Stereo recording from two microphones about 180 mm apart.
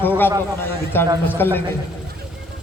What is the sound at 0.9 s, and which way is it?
Speech, 10° left (ahead or behind).